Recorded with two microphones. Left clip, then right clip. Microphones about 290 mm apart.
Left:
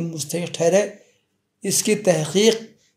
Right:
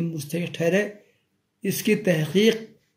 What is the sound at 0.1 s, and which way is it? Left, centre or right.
Speech, centre.